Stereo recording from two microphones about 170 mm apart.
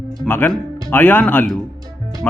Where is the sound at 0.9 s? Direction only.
10° left (ahead or behind).